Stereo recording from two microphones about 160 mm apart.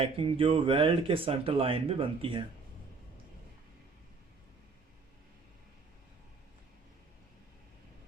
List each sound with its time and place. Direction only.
0.0 s speech: 35° right (ahead or behind)